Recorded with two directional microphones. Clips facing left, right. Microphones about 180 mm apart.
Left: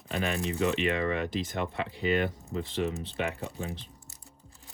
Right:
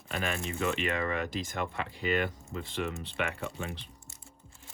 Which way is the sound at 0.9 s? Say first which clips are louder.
Left 3 dB; 50° right (ahead or behind).